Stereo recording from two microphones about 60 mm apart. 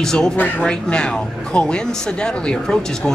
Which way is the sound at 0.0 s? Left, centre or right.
Centre.